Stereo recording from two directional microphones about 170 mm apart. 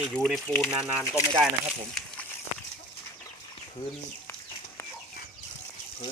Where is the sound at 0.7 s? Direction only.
10° right (ahead or behind).